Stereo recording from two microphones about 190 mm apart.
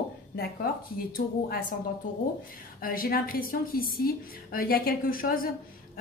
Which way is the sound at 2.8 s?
50° left (ahead or behind).